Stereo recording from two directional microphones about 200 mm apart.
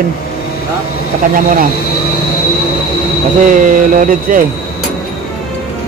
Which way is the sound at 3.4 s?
40° right (ahead or behind).